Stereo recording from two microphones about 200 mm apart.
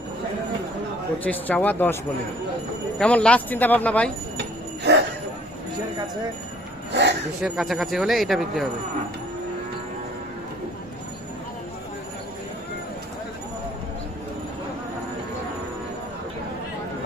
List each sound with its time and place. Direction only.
1.2 s speech: 10° left (ahead or behind)
3.0 s speech: 5° left (ahead or behind)
4.9 s a sound: 60° right (ahead or behind)
6.9 s speech: 60° right (ahead or behind)
7.4 s speech: centre (ahead or behind)